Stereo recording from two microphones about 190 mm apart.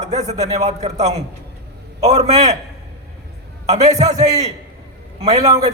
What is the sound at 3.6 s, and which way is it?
Speech, 35° right (ahead or behind).